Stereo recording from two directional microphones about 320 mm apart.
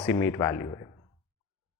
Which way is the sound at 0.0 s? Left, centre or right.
Centre.